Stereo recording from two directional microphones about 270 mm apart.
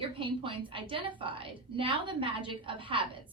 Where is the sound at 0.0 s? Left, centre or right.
Centre.